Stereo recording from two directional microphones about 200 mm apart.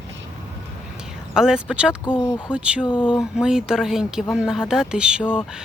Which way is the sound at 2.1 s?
20° left (ahead or behind).